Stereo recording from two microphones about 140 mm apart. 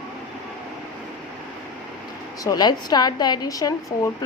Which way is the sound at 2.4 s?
25° left (ahead or behind).